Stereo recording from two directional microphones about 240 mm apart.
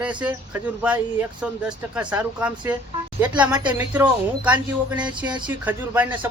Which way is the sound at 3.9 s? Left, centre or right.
Centre.